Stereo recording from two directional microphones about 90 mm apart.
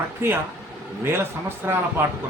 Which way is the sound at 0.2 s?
30° right (ahead or behind).